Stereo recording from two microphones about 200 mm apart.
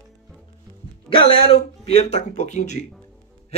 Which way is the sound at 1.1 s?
25° left (ahead or behind).